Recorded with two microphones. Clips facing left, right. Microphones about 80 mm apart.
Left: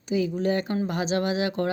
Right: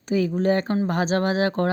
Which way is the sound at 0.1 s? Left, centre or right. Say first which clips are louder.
Right 4 dB; right.